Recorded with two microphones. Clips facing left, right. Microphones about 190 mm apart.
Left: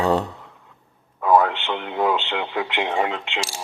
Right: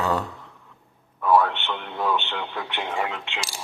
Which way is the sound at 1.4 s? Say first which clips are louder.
Left 4 dB; 90° left.